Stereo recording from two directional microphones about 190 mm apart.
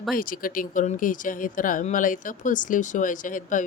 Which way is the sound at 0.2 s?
45° left (ahead or behind).